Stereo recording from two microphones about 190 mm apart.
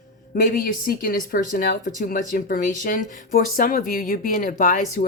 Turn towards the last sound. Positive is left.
turn(degrees=45)  # may be behind; listen again after turning